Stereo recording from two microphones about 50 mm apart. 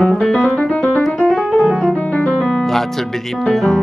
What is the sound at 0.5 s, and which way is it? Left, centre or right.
Keyboard, left.